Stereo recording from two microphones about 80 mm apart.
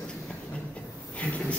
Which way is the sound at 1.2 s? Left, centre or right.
Centre.